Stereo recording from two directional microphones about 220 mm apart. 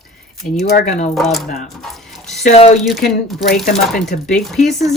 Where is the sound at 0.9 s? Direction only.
30° left (ahead or behind).